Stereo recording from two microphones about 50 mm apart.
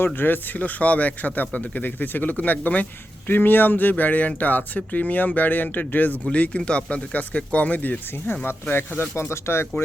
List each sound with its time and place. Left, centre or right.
0.0 s speech: left
8.7 s speech: left